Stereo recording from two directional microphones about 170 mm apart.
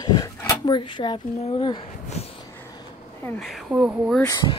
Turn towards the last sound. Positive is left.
turn(degrees=20)  # may be behind; listen again after turning